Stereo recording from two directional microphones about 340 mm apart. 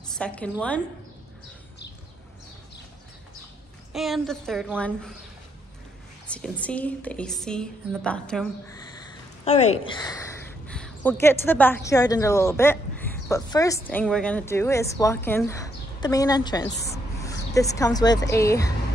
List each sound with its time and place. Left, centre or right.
0.2 s a woman's voice: centre
3.9 s a woman's voice: centre
6.2 s a woman's voice: centre
9.4 s a woman's voice: centre